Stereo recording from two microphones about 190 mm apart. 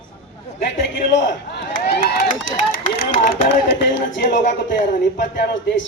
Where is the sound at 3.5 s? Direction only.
65° left (ahead or behind).